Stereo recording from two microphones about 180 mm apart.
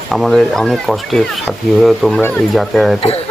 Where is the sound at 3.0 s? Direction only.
35° left (ahead or behind).